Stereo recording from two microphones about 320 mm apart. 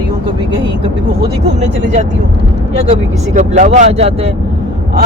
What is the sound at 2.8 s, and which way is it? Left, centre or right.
Speech, right.